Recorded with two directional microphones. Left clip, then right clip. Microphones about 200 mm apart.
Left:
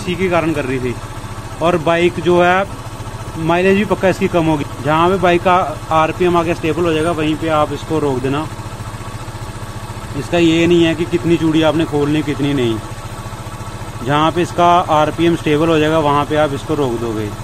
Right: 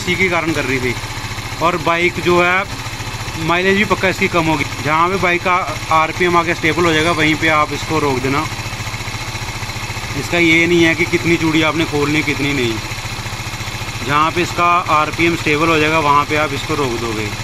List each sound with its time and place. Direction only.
0.1 s speech: 10° left (ahead or behind)
10.3 s speech: 10° left (ahead or behind)
14.0 s speech: 20° left (ahead or behind)